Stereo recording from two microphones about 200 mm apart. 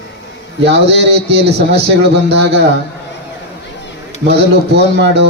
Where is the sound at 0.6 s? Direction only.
60° right (ahead or behind).